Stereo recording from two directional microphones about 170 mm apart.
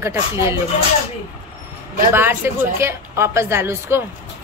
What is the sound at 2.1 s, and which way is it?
A woman's voice, 15° right (ahead or behind).